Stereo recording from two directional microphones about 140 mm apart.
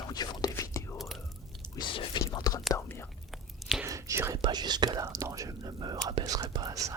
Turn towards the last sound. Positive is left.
turn(degrees=-25)  # may be behind; listen again after turning